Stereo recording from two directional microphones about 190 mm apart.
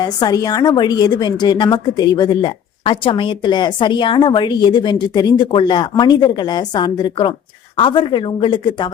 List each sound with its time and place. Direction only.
0.0 s a woman's voice: 20° left (ahead or behind)